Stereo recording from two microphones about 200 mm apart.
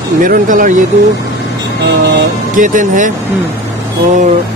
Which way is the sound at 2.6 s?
40° right (ahead or behind).